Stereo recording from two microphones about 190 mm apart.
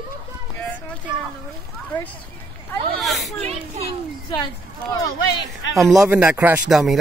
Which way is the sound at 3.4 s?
35° right (ahead or behind).